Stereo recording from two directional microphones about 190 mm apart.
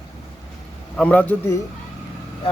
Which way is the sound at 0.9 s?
5° left (ahead or behind).